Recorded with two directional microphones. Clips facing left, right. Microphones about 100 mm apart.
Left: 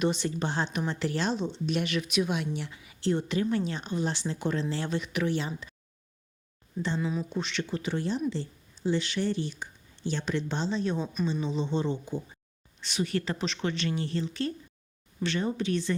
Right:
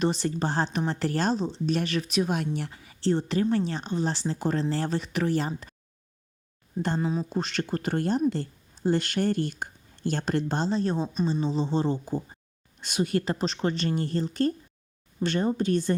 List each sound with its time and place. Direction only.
0.0 s a woman's voice: 40° right (ahead or behind)
6.7 s a woman's voice: 45° right (ahead or behind)